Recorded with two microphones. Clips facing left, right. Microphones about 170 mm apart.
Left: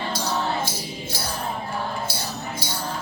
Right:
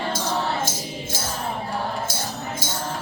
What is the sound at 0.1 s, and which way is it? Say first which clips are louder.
Music: left 1 dB; 50° right (ahead or behind).